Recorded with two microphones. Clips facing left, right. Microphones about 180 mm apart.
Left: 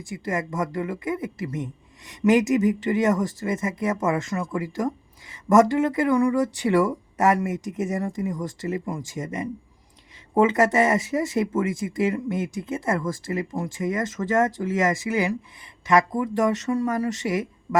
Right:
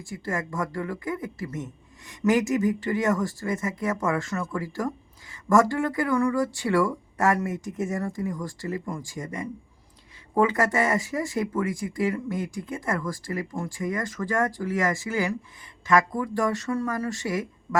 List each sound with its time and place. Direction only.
0.0 s speech: 20° left (ahead or behind)